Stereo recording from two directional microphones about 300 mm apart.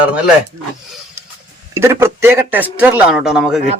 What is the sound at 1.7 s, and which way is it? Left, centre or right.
A man's voice, centre.